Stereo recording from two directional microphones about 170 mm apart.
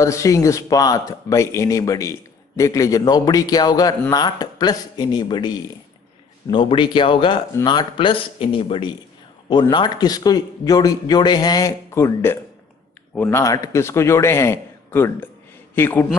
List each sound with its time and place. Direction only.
0.0 s a man's voice: 20° left (ahead or behind)
6.5 s a man's voice: 30° left (ahead or behind); by 16.1 s 10° left (ahead or behind)